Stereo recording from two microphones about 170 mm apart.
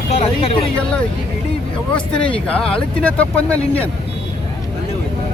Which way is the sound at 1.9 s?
5° left (ahead or behind).